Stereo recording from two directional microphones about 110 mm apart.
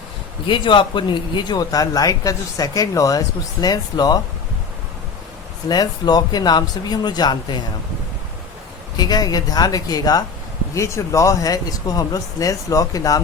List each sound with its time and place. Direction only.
0.4 s speech: 50° left (ahead or behind)
5.6 s speech: 40° left (ahead or behind)
9.0 s speech: 35° left (ahead or behind)